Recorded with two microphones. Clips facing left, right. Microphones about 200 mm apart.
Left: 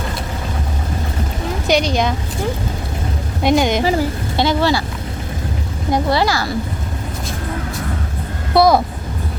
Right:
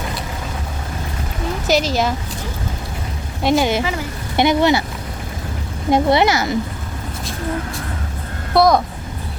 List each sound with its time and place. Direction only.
1.6 s a woman's voice: 5° right (ahead or behind)
3.4 s a woman's voice: centre (ahead or behind)
4.4 s speech: 20° right (ahead or behind)
5.9 s speech: 20° right (ahead or behind)
8.5 s a woman's voice: centre (ahead or behind)